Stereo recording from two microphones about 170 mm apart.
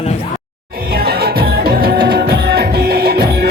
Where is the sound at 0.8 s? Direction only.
60° right (ahead or behind).